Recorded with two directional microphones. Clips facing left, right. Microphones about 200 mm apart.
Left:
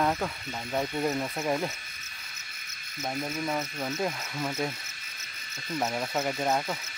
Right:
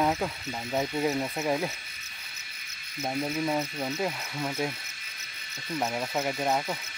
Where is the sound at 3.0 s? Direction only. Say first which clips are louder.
Right 3 dB; 10° right (ahead or behind).